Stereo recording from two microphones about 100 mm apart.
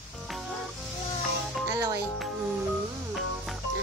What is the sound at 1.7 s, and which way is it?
Music, 30° right (ahead or behind).